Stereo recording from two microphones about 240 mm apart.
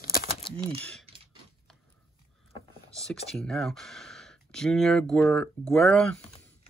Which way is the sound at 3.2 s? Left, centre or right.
Centre.